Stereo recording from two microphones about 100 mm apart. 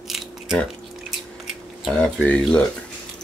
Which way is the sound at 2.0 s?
10° left (ahead or behind).